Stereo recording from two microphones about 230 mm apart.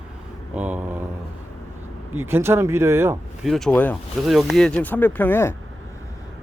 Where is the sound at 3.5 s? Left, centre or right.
Centre.